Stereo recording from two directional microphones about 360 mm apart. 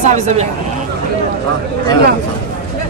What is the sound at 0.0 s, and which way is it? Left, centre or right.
Speech, centre.